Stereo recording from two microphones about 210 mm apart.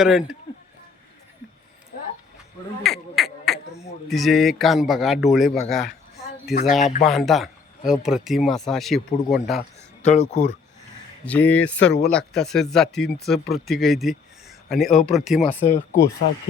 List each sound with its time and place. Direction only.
0.0 s speech: 5° right (ahead or behind)
1.9 s a sound: 45° left (ahead or behind)
2.8 s beatboxing: centre (ahead or behind)
4.1 s speech: centre (ahead or behind)
9.6 s speech: 30° left (ahead or behind)
11.3 s speech: 5° left (ahead or behind)
15.6 s speech: 35° left (ahead or behind)